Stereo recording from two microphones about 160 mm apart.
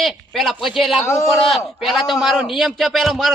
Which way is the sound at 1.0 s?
20° left (ahead or behind).